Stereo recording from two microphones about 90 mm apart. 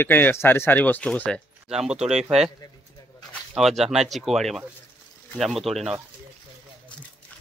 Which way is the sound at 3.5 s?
Centre (ahead or behind).